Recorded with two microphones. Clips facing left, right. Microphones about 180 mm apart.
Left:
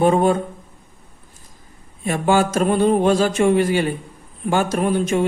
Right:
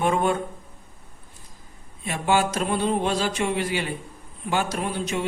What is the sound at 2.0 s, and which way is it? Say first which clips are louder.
Speech: left 5 dB; 45° left (ahead or behind).